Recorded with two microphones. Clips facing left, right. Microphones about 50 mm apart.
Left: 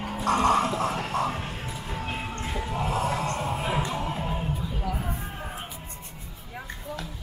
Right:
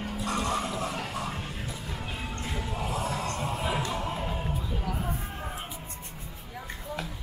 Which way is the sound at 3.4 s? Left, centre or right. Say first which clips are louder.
Left 2 dB; centre.